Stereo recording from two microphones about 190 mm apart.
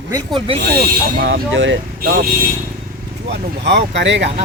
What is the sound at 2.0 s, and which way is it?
Speech, 50° right (ahead or behind).